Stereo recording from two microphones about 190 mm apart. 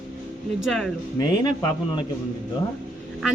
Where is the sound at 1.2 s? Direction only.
20° left (ahead or behind).